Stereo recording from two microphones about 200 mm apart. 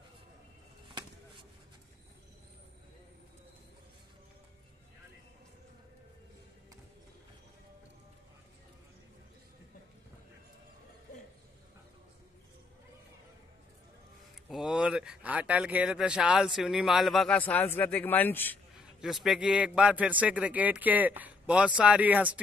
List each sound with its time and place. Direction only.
0.8 s chop: 25° right (ahead or behind)
14.5 s speech: 5° right (ahead or behind)
18.8 s a man's voice: 5° right (ahead or behind)